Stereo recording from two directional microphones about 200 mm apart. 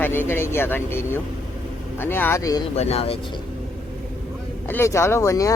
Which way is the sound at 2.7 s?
30° left (ahead or behind).